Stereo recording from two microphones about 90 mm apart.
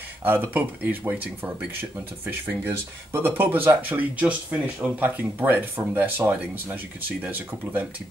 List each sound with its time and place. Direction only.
0.2 s speech: 20° right (ahead or behind)